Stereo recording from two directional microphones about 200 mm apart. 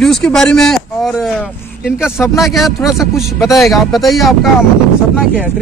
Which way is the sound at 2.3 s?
Centre (ahead or behind).